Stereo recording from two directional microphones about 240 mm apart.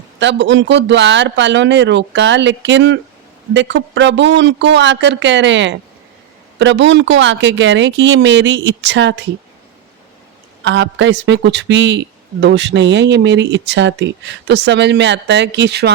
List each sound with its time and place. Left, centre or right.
0.2 s speech: right
10.6 s speech: right